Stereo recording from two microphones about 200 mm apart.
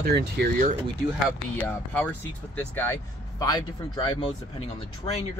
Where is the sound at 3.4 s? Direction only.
20° left (ahead or behind).